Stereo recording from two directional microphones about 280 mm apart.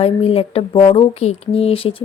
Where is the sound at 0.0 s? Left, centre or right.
Left.